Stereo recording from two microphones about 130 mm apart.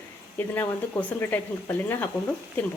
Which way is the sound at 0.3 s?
15° left (ahead or behind).